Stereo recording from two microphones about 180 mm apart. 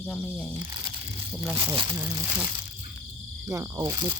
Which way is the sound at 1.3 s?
10° right (ahead or behind).